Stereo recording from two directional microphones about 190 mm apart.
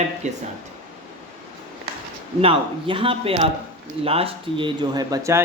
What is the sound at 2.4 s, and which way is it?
Speech, 30° right (ahead or behind).